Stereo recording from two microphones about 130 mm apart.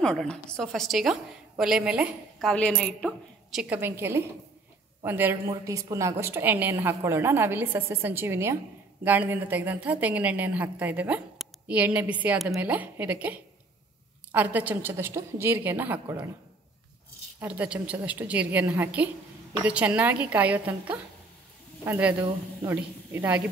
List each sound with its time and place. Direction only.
0.0 s a woman's voice: 5° left (ahead or behind)
2.3 s a woman's voice: 5° left (ahead or behind)
3.5 s a woman's voice: 10° right (ahead or behind)
17.4 s a woman's voice: 10° right (ahead or behind)